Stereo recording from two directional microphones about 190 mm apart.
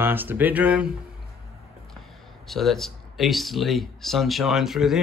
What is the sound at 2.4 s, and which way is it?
Speech, centre (ahead or behind).